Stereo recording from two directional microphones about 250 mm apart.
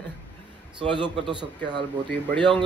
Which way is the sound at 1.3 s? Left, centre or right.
Centre.